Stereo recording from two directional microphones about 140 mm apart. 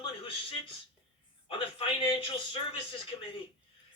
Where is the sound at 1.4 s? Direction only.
40° left (ahead or behind).